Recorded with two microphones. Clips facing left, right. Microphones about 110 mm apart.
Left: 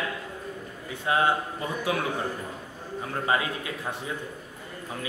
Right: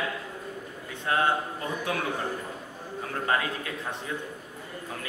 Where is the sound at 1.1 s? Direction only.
10° left (ahead or behind).